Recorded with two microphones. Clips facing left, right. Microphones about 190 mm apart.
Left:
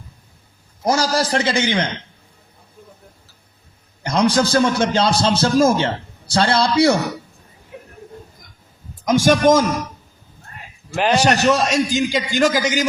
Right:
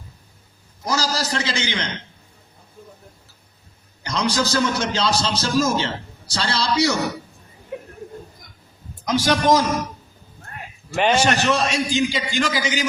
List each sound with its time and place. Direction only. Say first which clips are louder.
0.9 s a man's voice: left 6 dB; 55° left (ahead or behind)
4.0 s a man's voice: left 6 dB; 55° left (ahead or behind)
9.0 s a man's voice: left 4 dB; 50° left (ahead or behind)
10.9 s a man's voice: left 1 dB; centre (ahead or behind)
11.5 s a man's voice: left 3 dB; 40° left (ahead or behind)